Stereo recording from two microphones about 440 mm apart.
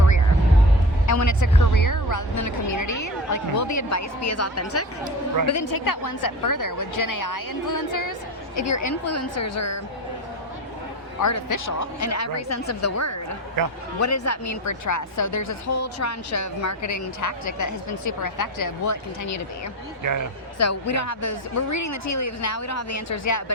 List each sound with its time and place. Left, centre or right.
1.0 s a woman's voice: left
5.7 s a woman's voice: left
11.2 s a woman's voice: left
20.0 s speech: right
20.6 s a woman's voice: left